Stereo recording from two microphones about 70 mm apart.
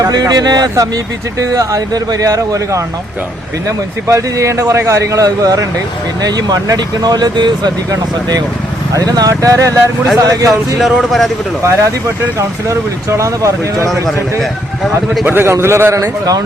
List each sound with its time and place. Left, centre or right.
0.0 s a man's voice: right
1.4 s speech: right
6.2 s speech: right
8.9 s speech: right
10.8 s speech: centre
11.6 s speech: right
15.2 s a man's voice: right